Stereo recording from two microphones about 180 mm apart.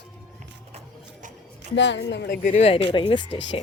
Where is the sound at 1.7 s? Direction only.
80° left.